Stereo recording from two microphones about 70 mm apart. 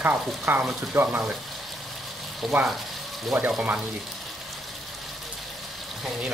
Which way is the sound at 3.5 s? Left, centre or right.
Centre.